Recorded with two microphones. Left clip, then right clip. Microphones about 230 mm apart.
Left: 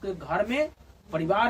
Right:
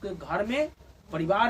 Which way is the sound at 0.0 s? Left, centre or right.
Centre.